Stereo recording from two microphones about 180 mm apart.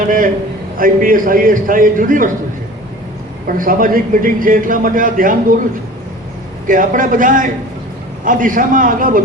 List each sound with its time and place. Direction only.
0.8 s a man's voice: 50° right (ahead or behind)
3.4 s a man's voice: 50° right (ahead or behind)
6.7 s a man's voice: 50° right (ahead or behind)